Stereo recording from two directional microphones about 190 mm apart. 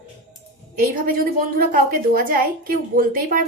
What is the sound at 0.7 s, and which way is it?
A woman's voice, 45° right (ahead or behind).